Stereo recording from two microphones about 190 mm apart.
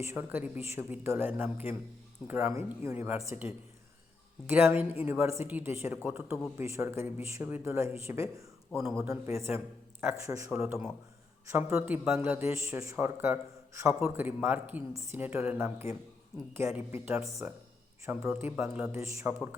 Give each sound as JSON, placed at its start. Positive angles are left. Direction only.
{"t": 0.0, "sound": "a man's voice", "side_deg": -10}